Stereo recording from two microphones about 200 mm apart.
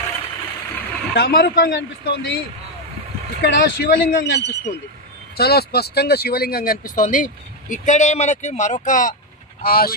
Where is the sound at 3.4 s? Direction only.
55° left (ahead or behind).